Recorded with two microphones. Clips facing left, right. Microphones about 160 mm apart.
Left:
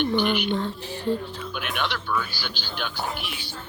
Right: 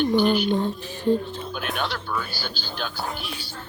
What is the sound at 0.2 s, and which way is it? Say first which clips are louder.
Speech: right 3 dB; 35° right (ahead or behind).